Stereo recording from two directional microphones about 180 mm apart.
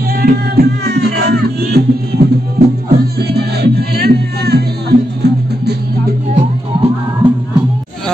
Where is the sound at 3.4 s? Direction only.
60° right (ahead or behind).